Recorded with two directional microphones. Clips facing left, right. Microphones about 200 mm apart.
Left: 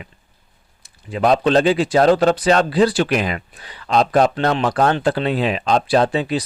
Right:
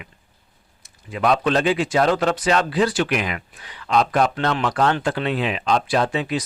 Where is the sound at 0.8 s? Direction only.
35° left (ahead or behind).